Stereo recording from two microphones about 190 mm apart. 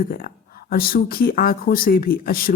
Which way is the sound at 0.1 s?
50° left (ahead or behind).